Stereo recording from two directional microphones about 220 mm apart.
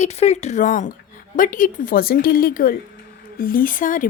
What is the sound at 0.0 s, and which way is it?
Speech, 30° left (ahead or behind).